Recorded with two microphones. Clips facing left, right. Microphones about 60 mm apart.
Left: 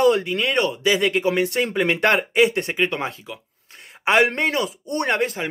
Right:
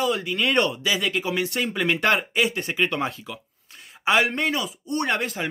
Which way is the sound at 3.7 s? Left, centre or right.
Left.